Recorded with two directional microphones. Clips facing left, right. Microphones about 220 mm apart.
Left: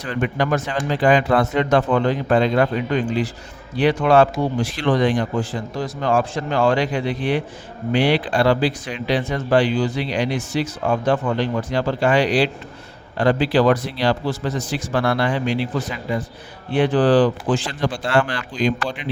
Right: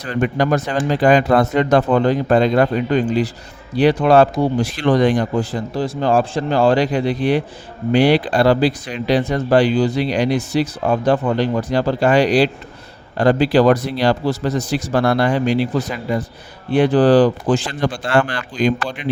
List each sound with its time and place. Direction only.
0.0 s speech: 40° right (ahead or behind)
16.7 s speech: 40° right (ahead or behind)